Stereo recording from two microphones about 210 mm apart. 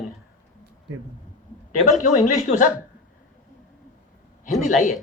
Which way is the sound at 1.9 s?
35° left (ahead or behind).